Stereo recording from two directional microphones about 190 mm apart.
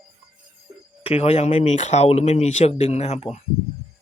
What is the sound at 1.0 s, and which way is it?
Speech, 30° left (ahead or behind).